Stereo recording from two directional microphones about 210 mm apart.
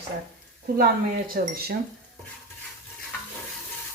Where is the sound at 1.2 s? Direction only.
45° right (ahead or behind).